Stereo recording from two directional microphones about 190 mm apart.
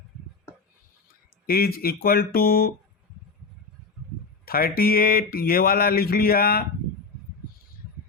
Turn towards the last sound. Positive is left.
turn(degrees=55)  # may be behind; listen again after turning